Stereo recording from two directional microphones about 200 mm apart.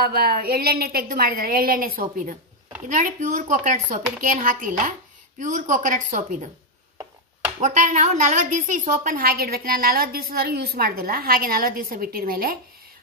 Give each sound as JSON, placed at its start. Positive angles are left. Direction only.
{"t": 0.0, "sound": "a woman's voice", "side_deg": -50}
{"t": 7.6, "sound": "a woman's voice", "side_deg": -40}